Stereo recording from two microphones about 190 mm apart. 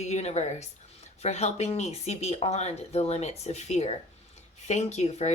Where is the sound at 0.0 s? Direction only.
35° left (ahead or behind).